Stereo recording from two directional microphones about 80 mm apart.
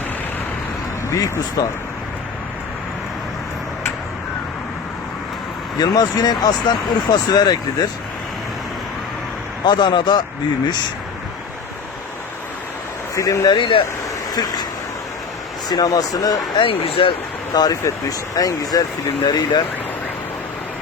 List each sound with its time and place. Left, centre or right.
1.1 s speech: left
5.8 s speech: left
9.6 s speech: left
13.1 s speech: left
13.5 s speech: left
14.3 s speech: left
15.7 s speech: left
16.6 s speech: left
17.5 s speech: left
19.2 s speech: left